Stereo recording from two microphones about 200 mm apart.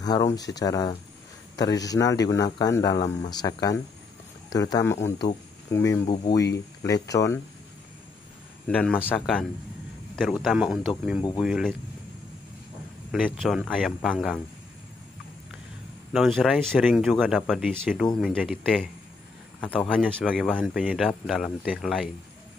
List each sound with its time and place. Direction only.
0.0 s speech: 15° left (ahead or behind)
8.6 s speech: 5° left (ahead or behind)
13.1 s speech: centre (ahead or behind)
16.1 s speech: centre (ahead or behind)
20.1 s speech: 5° left (ahead or behind)